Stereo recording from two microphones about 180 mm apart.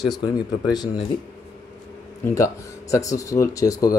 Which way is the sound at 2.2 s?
15° left (ahead or behind).